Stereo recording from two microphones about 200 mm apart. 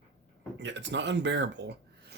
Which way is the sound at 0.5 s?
60° right (ahead or behind).